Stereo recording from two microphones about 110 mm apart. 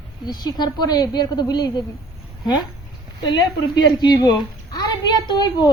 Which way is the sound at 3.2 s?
40° left (ahead or behind).